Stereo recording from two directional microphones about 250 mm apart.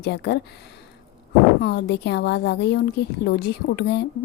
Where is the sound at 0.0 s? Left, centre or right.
Left.